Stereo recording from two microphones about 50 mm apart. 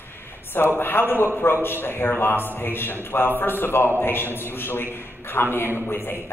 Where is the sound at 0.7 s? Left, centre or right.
Left.